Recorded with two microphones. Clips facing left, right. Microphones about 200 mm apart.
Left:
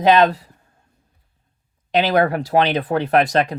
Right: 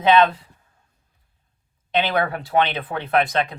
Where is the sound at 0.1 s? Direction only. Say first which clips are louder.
Left 2 dB; 40° left (ahead or behind).